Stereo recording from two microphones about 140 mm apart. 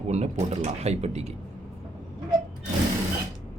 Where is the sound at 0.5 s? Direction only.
50° right (ahead or behind).